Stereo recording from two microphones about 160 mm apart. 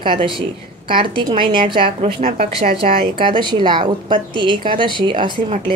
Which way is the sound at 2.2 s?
65° right (ahead or behind).